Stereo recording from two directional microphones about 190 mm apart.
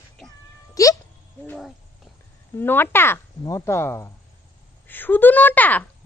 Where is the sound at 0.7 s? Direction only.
15° left (ahead or behind).